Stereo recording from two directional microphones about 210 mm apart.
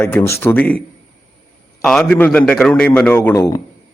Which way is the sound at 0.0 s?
10° left (ahead or behind).